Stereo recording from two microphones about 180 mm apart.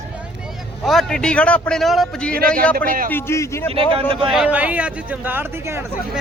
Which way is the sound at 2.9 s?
50° right (ahead or behind).